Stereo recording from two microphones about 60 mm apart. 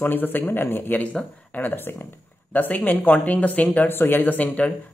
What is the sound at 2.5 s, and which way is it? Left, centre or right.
Speech, left.